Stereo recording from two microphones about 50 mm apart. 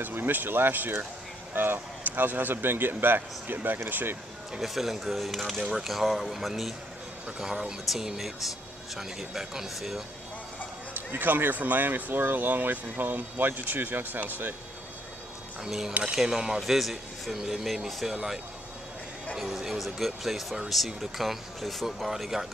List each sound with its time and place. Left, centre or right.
0.0 s speech: right
4.6 s speech: centre
11.0 s speech: right
15.6 s speech: centre